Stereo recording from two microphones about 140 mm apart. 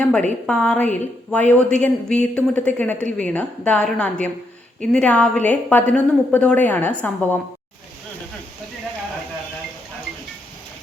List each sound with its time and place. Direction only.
0.0 s a woman's voice: 10° left (ahead or behind)